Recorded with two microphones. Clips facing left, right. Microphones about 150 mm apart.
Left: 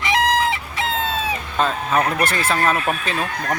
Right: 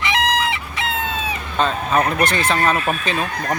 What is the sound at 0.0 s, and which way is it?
Chicken, 40° left (ahead or behind).